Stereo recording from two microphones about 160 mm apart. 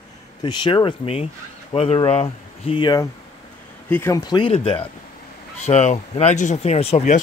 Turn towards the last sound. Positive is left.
turn(degrees=40)  # may be behind; listen again after turning